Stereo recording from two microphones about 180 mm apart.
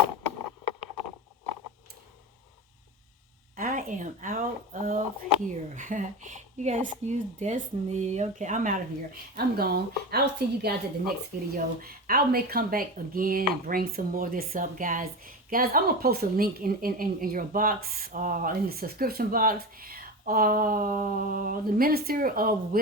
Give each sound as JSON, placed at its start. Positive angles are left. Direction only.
{"t": 3.5, "sound": "speech", "side_deg": -50}
{"t": 9.3, "sound": "a woman's voice", "side_deg": -60}